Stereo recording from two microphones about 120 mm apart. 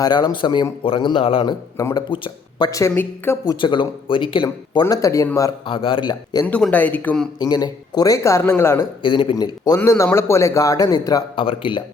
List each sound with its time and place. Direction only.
0.0 s speech: 35° left (ahead or behind)
1.8 s speech: 25° left (ahead or behind)
2.0 s speech: 45° left (ahead or behind)
2.6 s speech: 25° left (ahead or behind)
2.9 s speech: 15° left (ahead or behind)
3.6 s a man's voice: 45° left (ahead or behind)
4.4 s speech: 35° left (ahead or behind)
5.6 s a man's voice: 45° left (ahead or behind)
6.5 s speech: 10° left (ahead or behind)
7.3 s speech: 35° left (ahead or behind)
9.0 s speech: 40° left (ahead or behind)
9.8 s speech: 20° left (ahead or behind)
11.3 s a man's voice: 45° left (ahead or behind)